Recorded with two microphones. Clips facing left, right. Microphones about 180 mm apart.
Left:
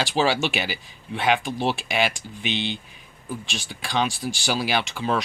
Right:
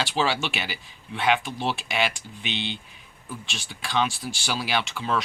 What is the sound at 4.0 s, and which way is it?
Speech, 40° left (ahead or behind).